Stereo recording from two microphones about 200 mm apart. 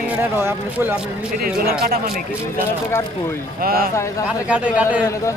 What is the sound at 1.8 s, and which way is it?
Speech, 50° right (ahead or behind).